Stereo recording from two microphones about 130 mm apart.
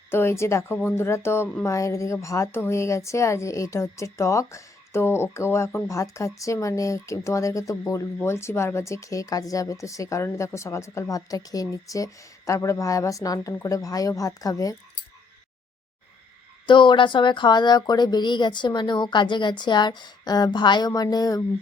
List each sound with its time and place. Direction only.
0.1 s a woman's voice: 20° left (ahead or behind)
16.6 s speech: 35° left (ahead or behind)